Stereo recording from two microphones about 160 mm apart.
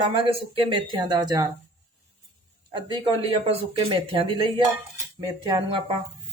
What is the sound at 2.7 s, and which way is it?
Speech, 30° right (ahead or behind).